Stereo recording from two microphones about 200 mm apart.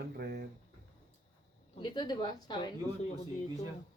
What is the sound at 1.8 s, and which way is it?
Speech, 25° left (ahead or behind).